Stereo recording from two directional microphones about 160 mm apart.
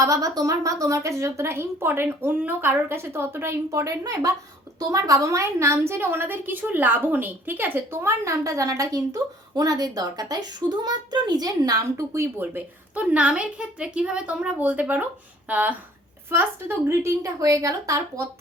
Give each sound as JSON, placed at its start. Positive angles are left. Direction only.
{"t": 0.0, "sound": "a woman's voice", "side_deg": -20}